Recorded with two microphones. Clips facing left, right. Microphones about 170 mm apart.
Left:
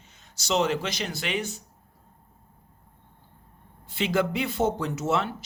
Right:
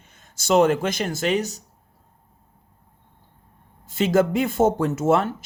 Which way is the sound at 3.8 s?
45° right (ahead or behind).